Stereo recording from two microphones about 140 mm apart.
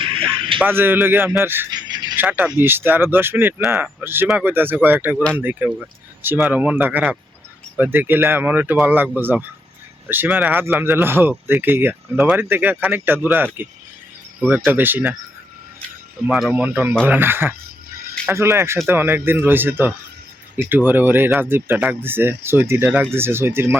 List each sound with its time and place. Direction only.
0.0 s music: 40° right (ahead or behind)
0.6 s speech: 15° right (ahead or behind)
1.7 s a sound: 30° right (ahead or behind)
2.1 s speech: 15° right (ahead or behind)
5.1 s speech: 5° left (ahead or behind)
5.4 s speech: 15° right (ahead or behind)
16.2 s speech: 5° right (ahead or behind)